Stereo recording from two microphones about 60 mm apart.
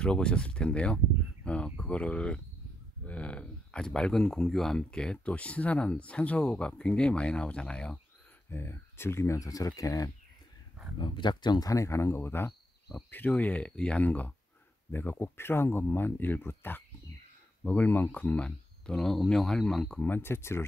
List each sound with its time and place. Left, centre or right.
0.0 s speech: centre
8.5 s speech: left
9.4 s speech: left
11.6 s speech: left
13.3 s speech: left
14.9 s speech: left
18.9 s speech: centre
20.0 s speech: left